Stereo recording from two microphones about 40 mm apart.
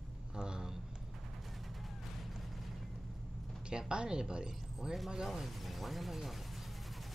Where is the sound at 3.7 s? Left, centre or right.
Right.